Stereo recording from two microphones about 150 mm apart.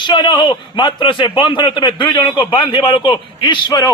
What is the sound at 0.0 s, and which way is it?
A man's voice, 30° left (ahead or behind).